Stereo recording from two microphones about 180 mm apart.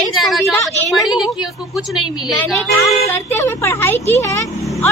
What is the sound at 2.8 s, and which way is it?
Speech, 15° left (ahead or behind).